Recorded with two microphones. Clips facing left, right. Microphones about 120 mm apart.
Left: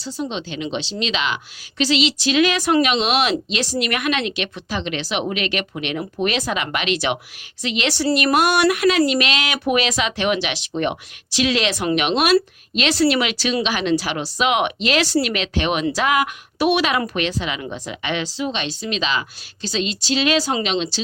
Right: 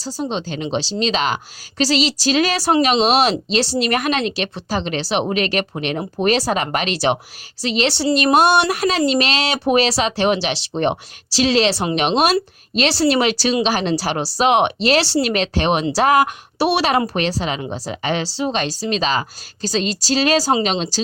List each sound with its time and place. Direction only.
0.0 s speech: 35° right (ahead or behind)